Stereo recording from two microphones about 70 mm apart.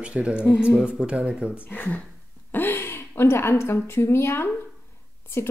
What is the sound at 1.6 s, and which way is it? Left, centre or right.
A woman's voice, left.